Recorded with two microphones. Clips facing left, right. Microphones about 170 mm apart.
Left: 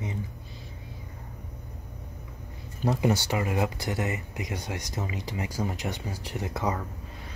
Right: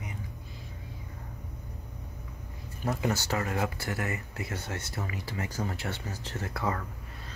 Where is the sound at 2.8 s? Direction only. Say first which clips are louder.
Left 5 dB; 20° left (ahead or behind).